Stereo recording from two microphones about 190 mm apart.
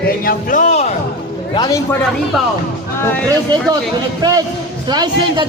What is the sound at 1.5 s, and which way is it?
Speech, 20° left (ahead or behind).